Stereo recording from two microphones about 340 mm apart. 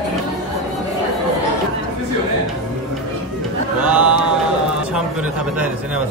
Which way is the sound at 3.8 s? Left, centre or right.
Centre.